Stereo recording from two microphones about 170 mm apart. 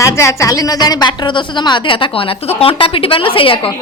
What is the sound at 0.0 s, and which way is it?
A woman's voice, 15° left (ahead or behind).